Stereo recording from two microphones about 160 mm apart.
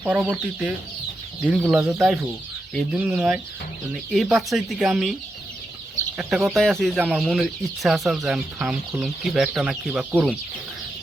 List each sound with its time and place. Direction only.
0.0 s speech: 10° right (ahead or behind)
6.1 s speech: centre (ahead or behind)